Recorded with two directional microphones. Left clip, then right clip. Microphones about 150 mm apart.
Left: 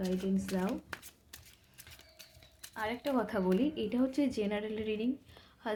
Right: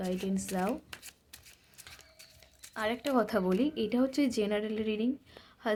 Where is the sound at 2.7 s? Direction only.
40° right (ahead or behind).